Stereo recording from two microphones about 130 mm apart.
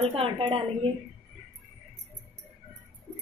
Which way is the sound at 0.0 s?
45° right (ahead or behind).